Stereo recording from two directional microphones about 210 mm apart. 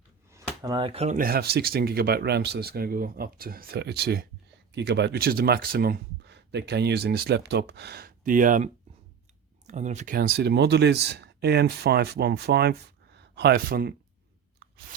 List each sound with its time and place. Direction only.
0.6 s speech: 20° right (ahead or behind); by 13.9 s 45° right (ahead or behind)